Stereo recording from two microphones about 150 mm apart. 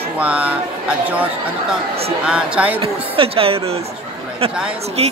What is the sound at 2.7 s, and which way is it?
Speech, 40° right (ahead or behind).